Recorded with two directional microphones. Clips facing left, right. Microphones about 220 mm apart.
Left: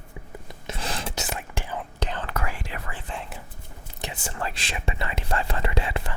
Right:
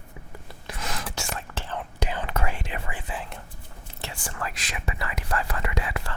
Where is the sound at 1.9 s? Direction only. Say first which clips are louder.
Right 2 dB; 10° right (ahead or behind).